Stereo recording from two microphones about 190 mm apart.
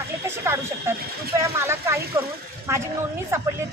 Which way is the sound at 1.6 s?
15° right (ahead or behind).